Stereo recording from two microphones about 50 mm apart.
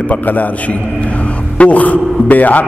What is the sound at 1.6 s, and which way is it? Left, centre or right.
A man's voice, left.